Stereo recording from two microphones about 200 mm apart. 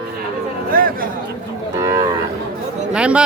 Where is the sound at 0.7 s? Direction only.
45° right (ahead or behind).